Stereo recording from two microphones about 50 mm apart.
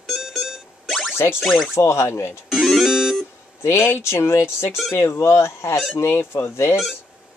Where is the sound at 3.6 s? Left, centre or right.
Left.